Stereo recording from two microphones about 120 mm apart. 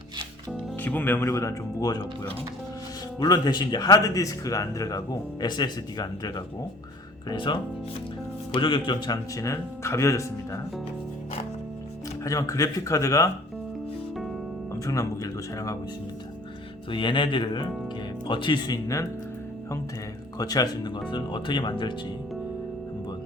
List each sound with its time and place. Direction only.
0.8 s speech: 15° left (ahead or behind)
1.3 s speech: 30° left (ahead or behind)
3.2 s speech: 35° left (ahead or behind)
12.2 s speech: 25° left (ahead or behind)
14.8 s speech: 30° left (ahead or behind)
16.9 s speech: 45° left (ahead or behind)
20.4 s speech: 30° left (ahead or behind)